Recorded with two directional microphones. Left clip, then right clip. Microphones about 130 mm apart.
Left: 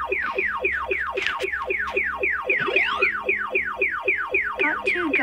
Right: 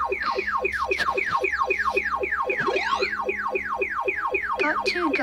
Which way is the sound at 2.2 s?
15° left (ahead or behind).